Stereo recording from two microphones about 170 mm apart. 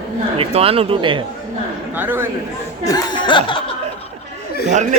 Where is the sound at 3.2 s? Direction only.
30° left (ahead or behind).